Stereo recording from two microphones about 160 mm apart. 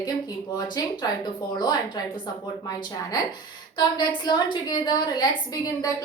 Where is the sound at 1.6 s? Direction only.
25° left (ahead or behind).